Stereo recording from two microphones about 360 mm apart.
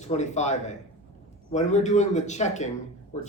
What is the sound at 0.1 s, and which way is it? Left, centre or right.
Speech, centre.